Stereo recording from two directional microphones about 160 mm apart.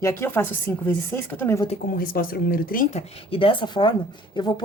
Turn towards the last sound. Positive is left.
turn(degrees=30)  # may be behind; listen again after turning